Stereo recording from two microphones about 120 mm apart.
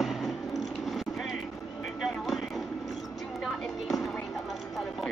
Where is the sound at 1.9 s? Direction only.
Centre (ahead or behind).